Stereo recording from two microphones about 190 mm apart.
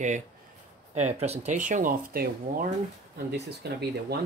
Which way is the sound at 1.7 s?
45° right (ahead or behind).